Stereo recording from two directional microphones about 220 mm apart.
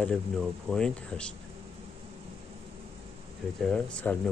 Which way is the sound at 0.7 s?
5° left (ahead or behind).